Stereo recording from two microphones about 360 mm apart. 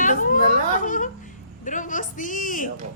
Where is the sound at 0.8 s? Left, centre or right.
Left.